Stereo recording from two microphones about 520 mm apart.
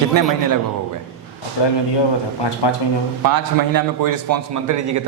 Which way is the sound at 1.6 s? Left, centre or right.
Left.